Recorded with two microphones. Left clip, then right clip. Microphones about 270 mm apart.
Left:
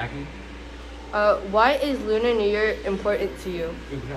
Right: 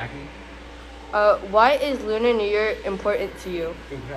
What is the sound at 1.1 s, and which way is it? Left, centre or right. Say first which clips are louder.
Speech: right 2 dB; right.